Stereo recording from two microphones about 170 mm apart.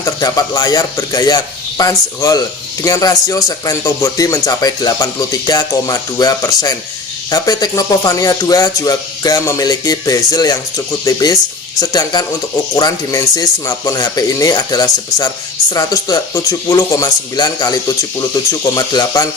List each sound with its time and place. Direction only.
0.0 s speech: 20° left (ahead or behind)